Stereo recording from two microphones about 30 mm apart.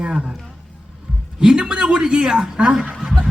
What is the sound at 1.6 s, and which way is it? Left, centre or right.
A man's voice, right.